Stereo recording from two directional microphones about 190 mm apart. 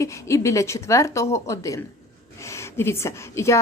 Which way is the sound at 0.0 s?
15° left (ahead or behind).